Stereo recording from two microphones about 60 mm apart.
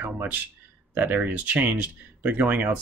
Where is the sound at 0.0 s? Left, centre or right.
Right.